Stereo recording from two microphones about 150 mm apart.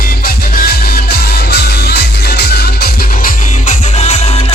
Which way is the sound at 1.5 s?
90° left.